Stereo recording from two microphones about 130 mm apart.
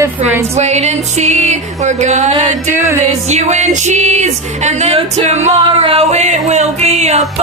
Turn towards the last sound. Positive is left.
turn(degrees=-60)  # may be behind; listen again after turning